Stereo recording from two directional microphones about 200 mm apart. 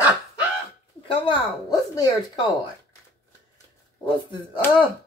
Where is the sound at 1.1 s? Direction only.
20° left (ahead or behind).